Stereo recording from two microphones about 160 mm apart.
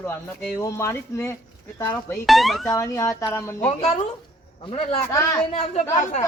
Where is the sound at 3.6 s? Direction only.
40° left (ahead or behind).